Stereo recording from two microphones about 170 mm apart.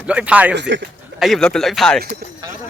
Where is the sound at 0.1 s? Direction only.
5° right (ahead or behind).